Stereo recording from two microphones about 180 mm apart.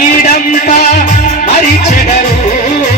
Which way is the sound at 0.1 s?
50° left (ahead or behind).